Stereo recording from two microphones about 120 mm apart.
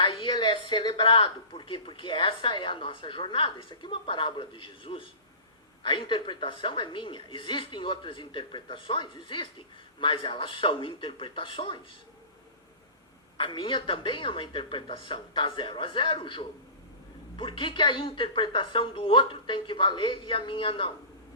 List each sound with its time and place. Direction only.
0.0 s speech: 45° left (ahead or behind)
13.3 s speech: 45° left (ahead or behind)